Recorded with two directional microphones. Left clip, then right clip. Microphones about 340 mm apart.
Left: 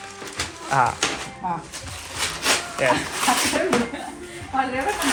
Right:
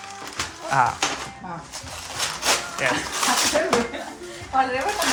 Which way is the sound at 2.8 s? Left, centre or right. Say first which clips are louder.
Left 4 dB; centre.